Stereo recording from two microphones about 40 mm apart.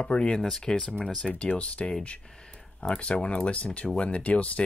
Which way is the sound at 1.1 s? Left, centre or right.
Left.